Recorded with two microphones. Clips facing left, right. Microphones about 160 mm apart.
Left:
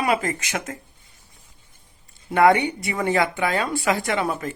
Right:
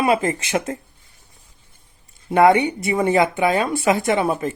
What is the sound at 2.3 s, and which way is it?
Speech, 20° right (ahead or behind).